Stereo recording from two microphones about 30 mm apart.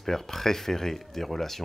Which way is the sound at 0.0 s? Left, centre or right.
Centre.